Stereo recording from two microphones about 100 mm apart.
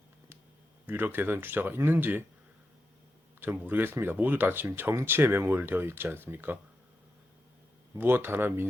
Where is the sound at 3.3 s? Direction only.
20° right (ahead or behind).